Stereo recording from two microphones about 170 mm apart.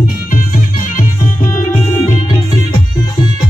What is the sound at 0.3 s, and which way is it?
Music, 55° left (ahead or behind).